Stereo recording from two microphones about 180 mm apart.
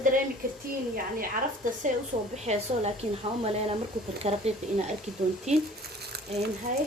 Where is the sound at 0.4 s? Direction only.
50° right (ahead or behind).